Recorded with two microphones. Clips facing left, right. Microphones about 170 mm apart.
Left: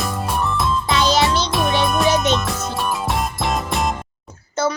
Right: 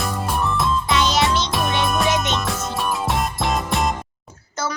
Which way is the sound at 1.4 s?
Centre (ahead or behind).